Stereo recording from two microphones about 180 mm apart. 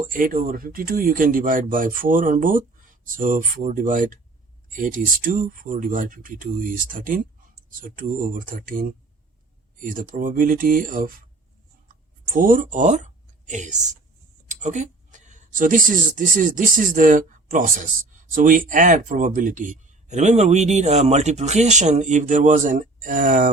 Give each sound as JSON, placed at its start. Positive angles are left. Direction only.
{"t": 0.1, "sound": "a man's voice", "side_deg": -50}
{"t": 12.3, "sound": "a man's voice", "side_deg": -50}